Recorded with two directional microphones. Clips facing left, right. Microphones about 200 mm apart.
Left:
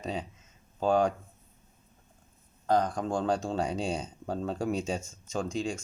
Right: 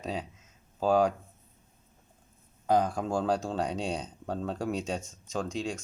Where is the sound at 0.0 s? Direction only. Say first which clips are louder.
Even; centre (ahead or behind).